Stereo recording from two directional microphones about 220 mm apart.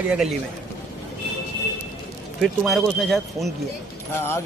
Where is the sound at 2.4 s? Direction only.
Centre (ahead or behind).